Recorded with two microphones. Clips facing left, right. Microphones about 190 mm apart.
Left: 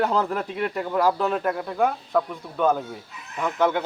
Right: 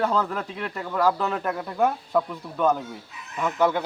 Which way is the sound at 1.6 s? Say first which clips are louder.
Even; centre (ahead or behind).